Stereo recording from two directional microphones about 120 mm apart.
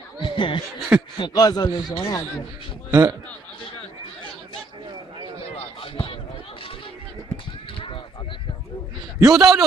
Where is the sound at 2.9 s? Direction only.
25° right (ahead or behind).